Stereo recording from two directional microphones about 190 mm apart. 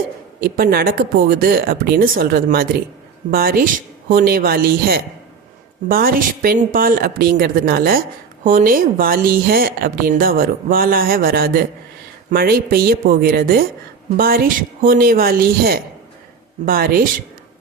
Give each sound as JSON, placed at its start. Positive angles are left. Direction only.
{"t": 0.4, "sound": "speech", "side_deg": -50}